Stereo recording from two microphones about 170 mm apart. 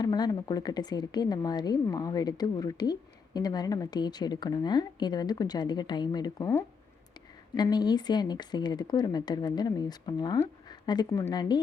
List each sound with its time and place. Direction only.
0.0 s a woman's voice: 25° left (ahead or behind)